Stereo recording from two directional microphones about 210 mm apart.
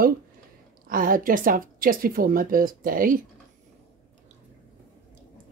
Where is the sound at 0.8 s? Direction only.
40° right (ahead or behind).